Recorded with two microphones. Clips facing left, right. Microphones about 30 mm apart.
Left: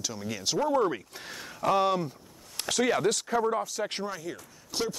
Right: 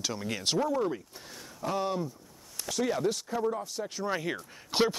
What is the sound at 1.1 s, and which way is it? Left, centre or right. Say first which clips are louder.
Speech: left 5 dB; left.